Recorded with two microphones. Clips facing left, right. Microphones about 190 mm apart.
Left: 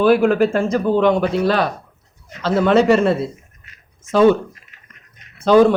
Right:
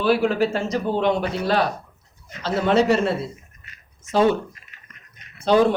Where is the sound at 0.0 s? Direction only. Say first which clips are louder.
Left 6 dB; 50° left (ahead or behind).